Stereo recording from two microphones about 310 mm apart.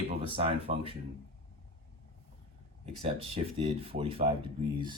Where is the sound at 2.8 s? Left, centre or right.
Centre.